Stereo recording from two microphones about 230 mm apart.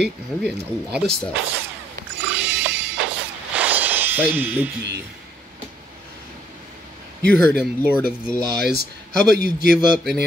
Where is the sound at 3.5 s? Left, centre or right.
Centre.